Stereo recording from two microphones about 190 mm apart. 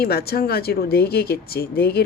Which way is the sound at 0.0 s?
55° left (ahead or behind).